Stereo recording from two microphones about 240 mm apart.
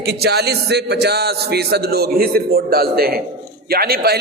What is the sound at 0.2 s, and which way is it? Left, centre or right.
A man's voice, right.